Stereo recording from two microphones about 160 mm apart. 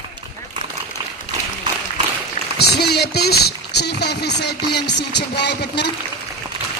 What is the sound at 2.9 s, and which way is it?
Speech, 90° left.